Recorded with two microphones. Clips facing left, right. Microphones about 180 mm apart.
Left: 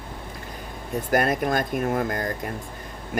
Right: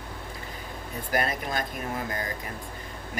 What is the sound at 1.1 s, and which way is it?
Speech, 50° left (ahead or behind).